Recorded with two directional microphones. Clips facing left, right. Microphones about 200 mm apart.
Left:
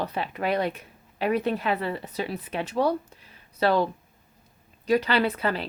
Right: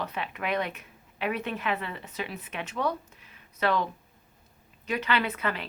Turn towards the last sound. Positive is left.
turn(degrees=35)  # may be behind; listen again after turning